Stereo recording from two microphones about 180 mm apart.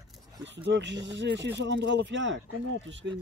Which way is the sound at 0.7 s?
75° right (ahead or behind).